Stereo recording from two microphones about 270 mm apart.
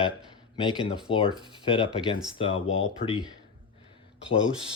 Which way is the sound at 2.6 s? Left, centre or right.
Left.